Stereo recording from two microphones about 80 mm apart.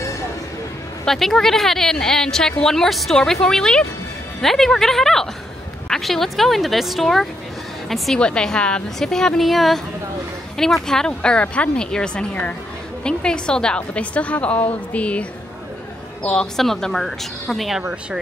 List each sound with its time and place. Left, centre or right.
1.0 s a woman's voice: centre
8.2 s a woman's voice: centre